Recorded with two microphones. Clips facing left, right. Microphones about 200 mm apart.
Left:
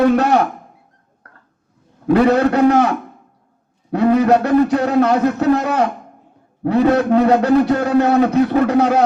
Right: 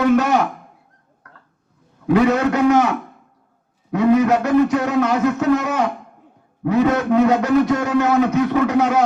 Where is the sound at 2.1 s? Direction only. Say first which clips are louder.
Left 3 dB; 35° left (ahead or behind).